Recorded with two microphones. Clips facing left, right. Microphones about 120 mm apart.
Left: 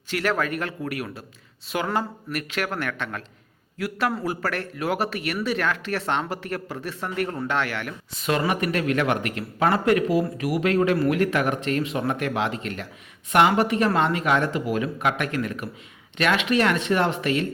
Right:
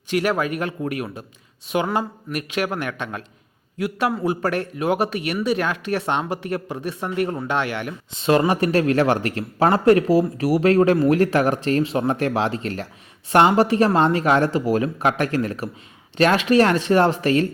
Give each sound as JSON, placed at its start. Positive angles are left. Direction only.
{"t": 0.1, "sound": "a man's voice", "side_deg": -15}